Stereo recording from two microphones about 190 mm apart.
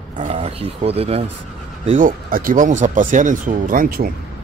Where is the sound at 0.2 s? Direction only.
30° right (ahead or behind).